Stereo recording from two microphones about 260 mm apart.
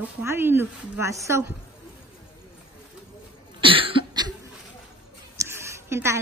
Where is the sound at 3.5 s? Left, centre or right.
Centre.